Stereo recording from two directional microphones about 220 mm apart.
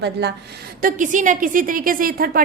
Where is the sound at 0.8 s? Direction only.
35° right (ahead or behind).